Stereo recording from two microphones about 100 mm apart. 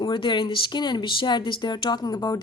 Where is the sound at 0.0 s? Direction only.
50° left (ahead or behind); by 2.4 s 35° left (ahead or behind).